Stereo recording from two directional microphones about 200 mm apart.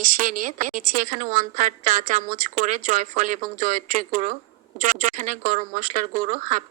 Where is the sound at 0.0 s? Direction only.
45° right (ahead or behind).